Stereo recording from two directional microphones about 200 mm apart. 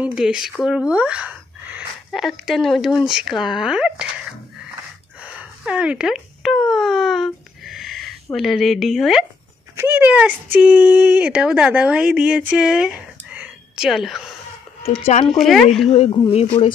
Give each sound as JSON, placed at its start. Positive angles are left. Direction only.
{"t": 0.0, "sound": "speech", "side_deg": -5}
{"t": 5.2, "sound": "a sound", "side_deg": -5}
{"t": 9.8, "sound": "speech", "side_deg": -10}
{"t": 13.3, "sound": "whispering", "side_deg": -5}
{"t": 15.2, "sound": "speech", "side_deg": 0}
{"t": 15.9, "sound": "speech", "side_deg": 25}